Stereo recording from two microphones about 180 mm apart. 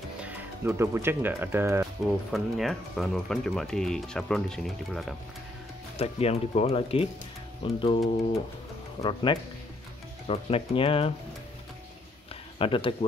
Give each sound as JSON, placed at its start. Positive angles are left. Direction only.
{"t": 0.2, "sound": "speech", "side_deg": -15}
{"t": 2.3, "sound": "speech", "side_deg": 0}
{"t": 5.9, "sound": "speech", "side_deg": 35}
{"t": 9.0, "sound": "speech", "side_deg": 25}
{"t": 12.5, "sound": "speech", "side_deg": 30}